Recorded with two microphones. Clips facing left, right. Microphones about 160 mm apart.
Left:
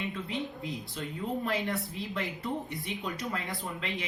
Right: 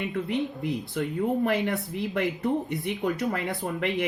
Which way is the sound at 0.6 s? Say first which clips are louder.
Right 8 dB; 70° right (ahead or behind).